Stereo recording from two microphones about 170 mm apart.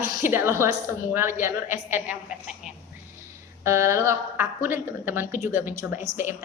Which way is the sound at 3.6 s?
15° right (ahead or behind).